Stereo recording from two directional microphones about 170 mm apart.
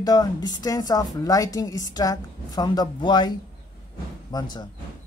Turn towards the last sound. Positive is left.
turn(degrees=25)  # may be behind; listen again after turning